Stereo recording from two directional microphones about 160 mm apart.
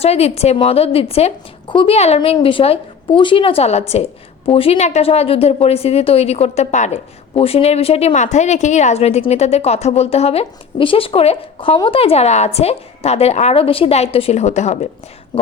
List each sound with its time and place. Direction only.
0.0 s a woman's voice: 40° left (ahead or behind)